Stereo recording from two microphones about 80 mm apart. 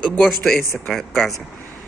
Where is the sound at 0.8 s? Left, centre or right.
Centre.